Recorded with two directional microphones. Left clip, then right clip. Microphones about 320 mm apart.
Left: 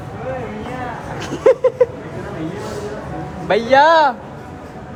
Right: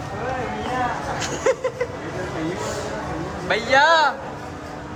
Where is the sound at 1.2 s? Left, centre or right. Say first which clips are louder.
Left 10 dB; centre.